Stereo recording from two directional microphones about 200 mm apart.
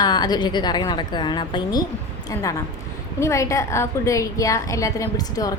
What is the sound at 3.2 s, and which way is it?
A woman's voice, 15° left (ahead or behind).